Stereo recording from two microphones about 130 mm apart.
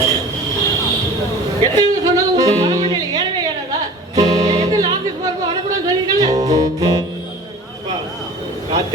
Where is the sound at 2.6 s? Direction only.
25° right (ahead or behind).